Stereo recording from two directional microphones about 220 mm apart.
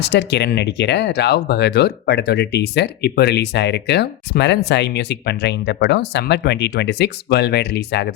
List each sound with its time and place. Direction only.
0.0 s speech: 50° left (ahead or behind)